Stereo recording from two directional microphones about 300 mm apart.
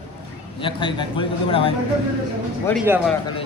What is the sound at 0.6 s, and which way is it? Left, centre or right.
A man's voice, centre.